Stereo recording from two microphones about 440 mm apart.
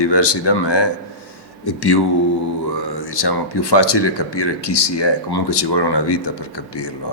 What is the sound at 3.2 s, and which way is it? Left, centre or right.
Speech, left.